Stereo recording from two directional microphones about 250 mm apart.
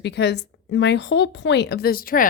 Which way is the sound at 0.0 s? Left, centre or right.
Left.